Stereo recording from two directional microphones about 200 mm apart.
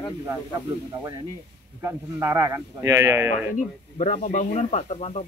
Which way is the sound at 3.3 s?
35° left (ahead or behind).